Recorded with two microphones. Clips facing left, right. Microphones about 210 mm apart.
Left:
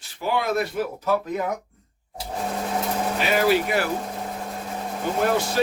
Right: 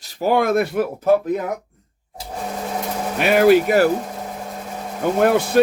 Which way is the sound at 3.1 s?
60° right (ahead or behind).